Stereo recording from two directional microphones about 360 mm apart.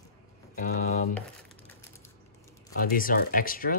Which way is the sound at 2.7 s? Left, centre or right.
Left.